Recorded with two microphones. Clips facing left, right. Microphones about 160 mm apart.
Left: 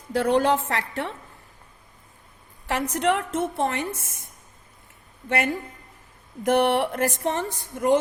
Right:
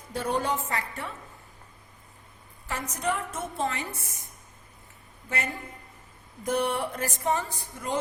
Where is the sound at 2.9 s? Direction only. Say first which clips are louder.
Left 6 dB; 75° left (ahead or behind).